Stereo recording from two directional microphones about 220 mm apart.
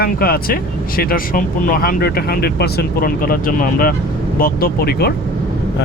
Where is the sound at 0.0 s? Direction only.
45° left (ahead or behind).